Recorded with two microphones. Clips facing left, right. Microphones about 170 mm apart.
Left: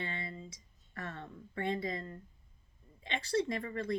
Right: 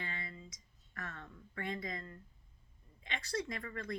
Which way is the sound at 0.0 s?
25° left (ahead or behind).